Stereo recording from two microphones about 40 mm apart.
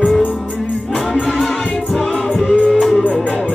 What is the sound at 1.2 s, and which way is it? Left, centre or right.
Music, centre.